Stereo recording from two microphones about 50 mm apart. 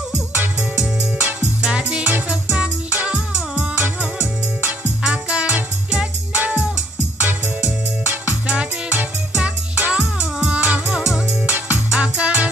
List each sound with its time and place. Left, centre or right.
0.4 s music: right
5.0 s music: centre
7.6 s music: right
9.4 s music: right
9.9 s music: centre
11.4 s music: right
11.9 s music: right